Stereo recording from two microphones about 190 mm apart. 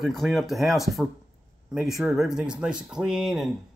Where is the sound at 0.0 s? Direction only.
Centre (ahead or behind).